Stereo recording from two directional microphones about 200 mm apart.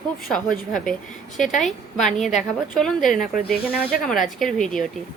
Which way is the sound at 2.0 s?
Centre (ahead or behind).